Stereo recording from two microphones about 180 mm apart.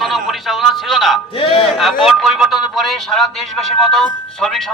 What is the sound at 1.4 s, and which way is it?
Speech, 30° left (ahead or behind).